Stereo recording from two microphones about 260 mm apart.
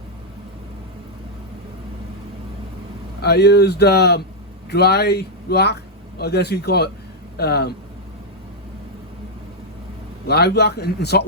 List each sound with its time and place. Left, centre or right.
3.2 s speech: left
10.2 s speech: left